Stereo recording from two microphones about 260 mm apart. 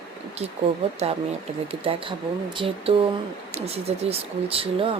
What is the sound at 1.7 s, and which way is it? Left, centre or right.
Speech, right.